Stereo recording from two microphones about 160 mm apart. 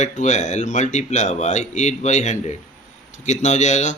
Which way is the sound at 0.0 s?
45° left (ahead or behind).